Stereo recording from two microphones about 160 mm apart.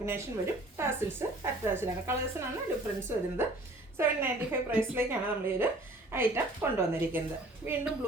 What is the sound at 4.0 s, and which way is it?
Speech, 15° right (ahead or behind).